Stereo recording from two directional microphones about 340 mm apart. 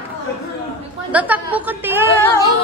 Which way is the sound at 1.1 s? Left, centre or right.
Centre.